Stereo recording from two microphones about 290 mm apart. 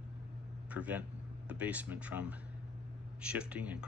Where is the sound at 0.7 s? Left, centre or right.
Centre.